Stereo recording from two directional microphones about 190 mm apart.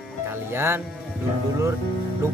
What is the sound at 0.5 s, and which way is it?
Speech, 10° right (ahead or behind).